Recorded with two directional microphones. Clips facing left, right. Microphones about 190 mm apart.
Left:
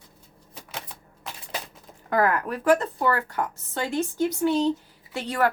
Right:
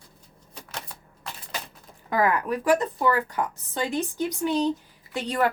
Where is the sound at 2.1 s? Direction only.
15° right (ahead or behind).